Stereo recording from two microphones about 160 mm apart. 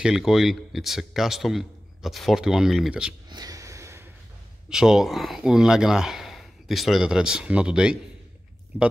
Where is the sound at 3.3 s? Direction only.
25° right (ahead or behind).